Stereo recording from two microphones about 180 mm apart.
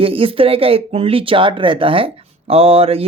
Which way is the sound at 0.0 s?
30° right (ahead or behind).